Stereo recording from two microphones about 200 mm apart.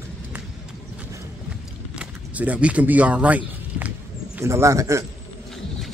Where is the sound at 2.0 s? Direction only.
5° right (ahead or behind).